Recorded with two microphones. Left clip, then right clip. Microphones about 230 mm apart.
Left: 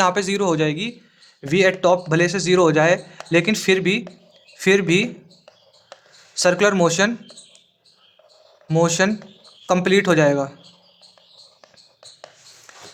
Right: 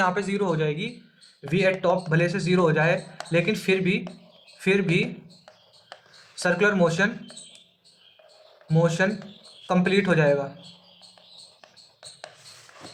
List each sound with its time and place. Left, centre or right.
0.0 s speech: left
6.3 s speech: left
8.6 s speech: left